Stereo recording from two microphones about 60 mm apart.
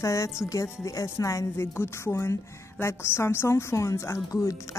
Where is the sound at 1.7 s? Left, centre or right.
Left.